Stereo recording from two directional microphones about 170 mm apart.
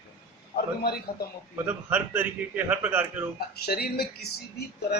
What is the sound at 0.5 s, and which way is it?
Speech, 70° left (ahead or behind).